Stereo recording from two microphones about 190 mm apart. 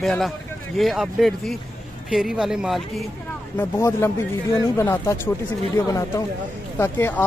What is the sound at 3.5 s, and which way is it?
Speech, 10° left (ahead or behind).